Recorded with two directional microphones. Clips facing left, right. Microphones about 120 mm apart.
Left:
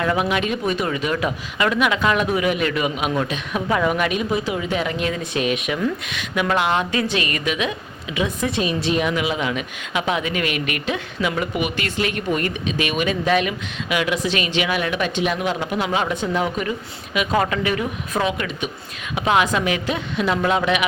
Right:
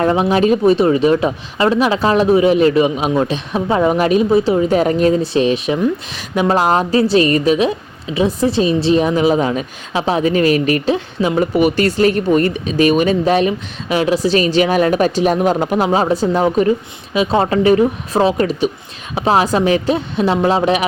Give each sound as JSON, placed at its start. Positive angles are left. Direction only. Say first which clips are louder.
{"t": 0.0, "sound": "a woman's voice", "louder": "right 7 dB", "side_deg": -30}